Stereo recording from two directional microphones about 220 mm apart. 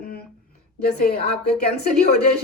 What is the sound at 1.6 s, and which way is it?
Speech, 45° left (ahead or behind).